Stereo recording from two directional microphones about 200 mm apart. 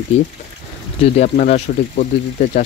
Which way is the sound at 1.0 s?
35° left (ahead or behind).